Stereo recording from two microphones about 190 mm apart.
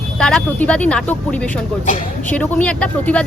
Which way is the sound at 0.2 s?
5° left (ahead or behind).